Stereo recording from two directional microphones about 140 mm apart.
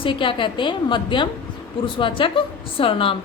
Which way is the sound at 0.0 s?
35° left (ahead or behind).